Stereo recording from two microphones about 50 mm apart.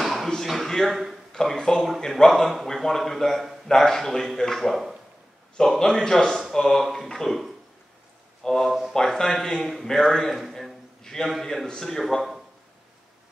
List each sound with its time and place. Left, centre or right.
0.0 s a sound: centre
1.3 s a man's voice: centre
5.6 s a man's voice: centre
10.5 s a sound: centre
11.4 s speech: centre
12.0 s a man's voice: centre